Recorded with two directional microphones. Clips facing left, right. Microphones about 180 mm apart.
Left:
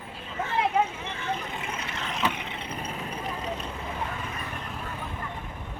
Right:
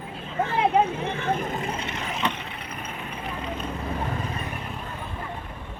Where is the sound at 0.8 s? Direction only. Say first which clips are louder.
Right 5 dB; 60° right (ahead or behind); by 1.7 s 45° right (ahead or behind).